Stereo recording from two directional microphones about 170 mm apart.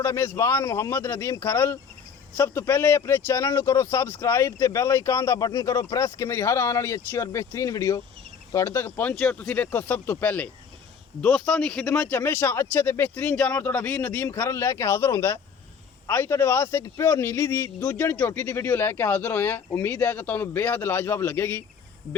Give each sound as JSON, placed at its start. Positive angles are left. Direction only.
{"t": 0.0, "sound": "speech", "side_deg": 15}